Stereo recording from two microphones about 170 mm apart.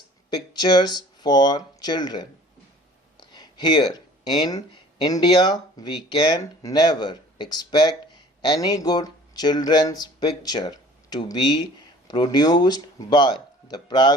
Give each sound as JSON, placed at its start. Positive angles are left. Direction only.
{"t": 0.3, "sound": "speech", "side_deg": 25}